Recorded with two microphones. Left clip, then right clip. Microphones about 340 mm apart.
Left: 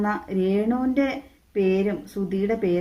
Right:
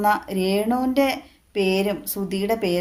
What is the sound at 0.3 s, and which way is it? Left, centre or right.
Speech, right.